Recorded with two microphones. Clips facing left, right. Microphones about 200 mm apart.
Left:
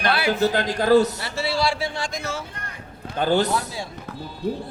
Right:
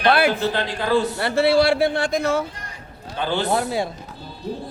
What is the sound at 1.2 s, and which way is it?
Speech, 60° right (ahead or behind).